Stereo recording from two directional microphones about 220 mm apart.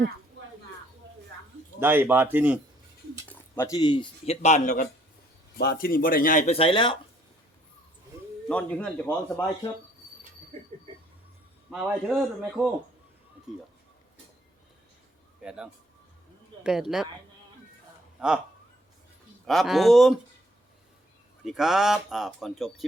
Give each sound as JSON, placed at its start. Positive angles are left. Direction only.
{"t": 1.8, "sound": "speech", "side_deg": -10}
{"t": 3.2, "sound": "speech", "side_deg": 10}
{"t": 8.4, "sound": "a man's voice", "side_deg": 5}
{"t": 11.7, "sound": "speech", "side_deg": 0}
{"t": 15.4, "sound": "speech", "side_deg": -5}
{"t": 18.2, "sound": "speech", "side_deg": -5}
{"t": 19.5, "sound": "speech", "side_deg": 0}
{"t": 21.4, "sound": "speech", "side_deg": 0}